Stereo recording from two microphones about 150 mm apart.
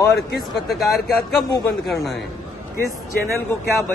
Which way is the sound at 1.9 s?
Centre (ahead or behind).